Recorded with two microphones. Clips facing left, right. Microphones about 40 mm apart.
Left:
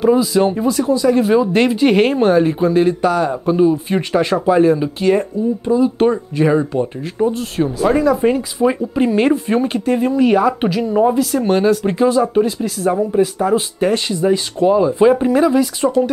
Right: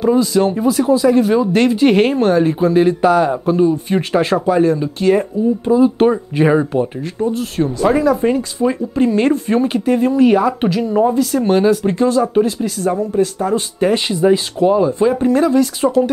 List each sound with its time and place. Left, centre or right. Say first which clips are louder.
0.0 s speech: even; centre
3.5 s speech: left 3 dB; centre
4.5 s speech: left 1 dB; centre
5.3 s speech: right 2 dB; centre
6.3 s speech: right 1 dB; centre
7.3 s speech: right 1 dB; centre
13.9 s speech: right 2 dB; centre
14.3 s speech: left 3 dB; centre
15.0 s speech: left 2 dB; centre